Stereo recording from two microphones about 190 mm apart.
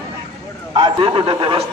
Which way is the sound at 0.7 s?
25° right (ahead or behind).